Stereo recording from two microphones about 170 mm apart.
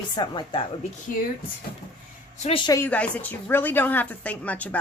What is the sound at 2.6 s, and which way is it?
A woman's voice, 15° left (ahead or behind).